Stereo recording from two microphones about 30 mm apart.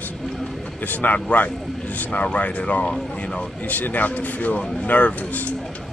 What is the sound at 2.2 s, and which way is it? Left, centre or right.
Speech, left.